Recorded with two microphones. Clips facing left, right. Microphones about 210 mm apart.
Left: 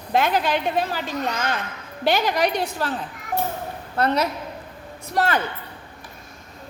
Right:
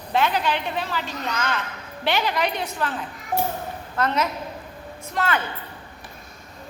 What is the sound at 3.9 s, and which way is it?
A woman's voice, 35° left (ahead or behind).